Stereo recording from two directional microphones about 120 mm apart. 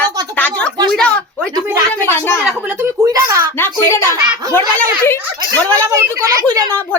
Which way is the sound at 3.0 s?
25° right (ahead or behind).